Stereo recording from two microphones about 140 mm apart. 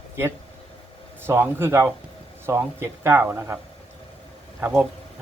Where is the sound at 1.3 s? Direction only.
15° right (ahead or behind).